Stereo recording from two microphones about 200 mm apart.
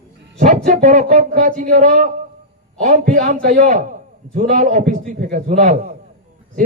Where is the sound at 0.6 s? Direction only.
40° right (ahead or behind).